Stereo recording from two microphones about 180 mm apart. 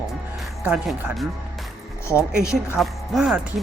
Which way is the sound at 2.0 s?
15° left (ahead or behind).